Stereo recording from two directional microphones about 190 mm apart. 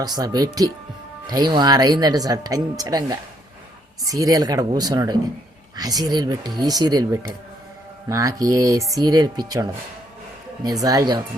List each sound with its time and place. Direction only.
0.0 s speech: 20° right (ahead or behind)